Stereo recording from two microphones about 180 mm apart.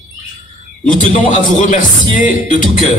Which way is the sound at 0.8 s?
45° left (ahead or behind).